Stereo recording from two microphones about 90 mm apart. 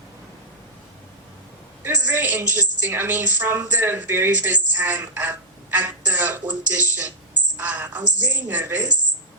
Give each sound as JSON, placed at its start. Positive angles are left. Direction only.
{"t": 1.8, "sound": "a woman's voice", "side_deg": -20}